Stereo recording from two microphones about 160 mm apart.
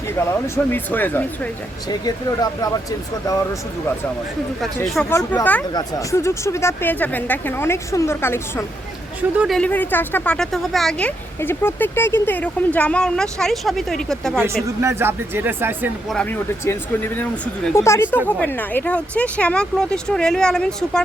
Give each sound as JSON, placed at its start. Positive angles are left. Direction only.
{"t": 0.2, "sound": "speech", "side_deg": 15}
{"t": 1.9, "sound": "speech", "side_deg": 25}
{"t": 5.0, "sound": "speech", "side_deg": 15}
{"t": 14.8, "sound": "speech", "side_deg": -15}
{"t": 16.0, "sound": "speech", "side_deg": 5}